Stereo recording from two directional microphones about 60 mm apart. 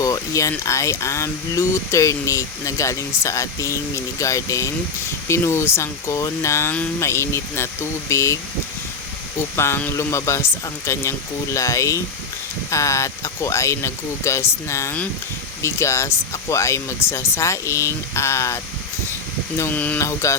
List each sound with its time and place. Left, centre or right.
0.0 s speech: left
9.6 s speech: left
19.7 s a sound: left
20.0 s speech: left